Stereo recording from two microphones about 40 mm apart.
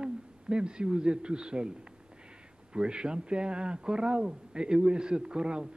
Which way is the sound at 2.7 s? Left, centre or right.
Right.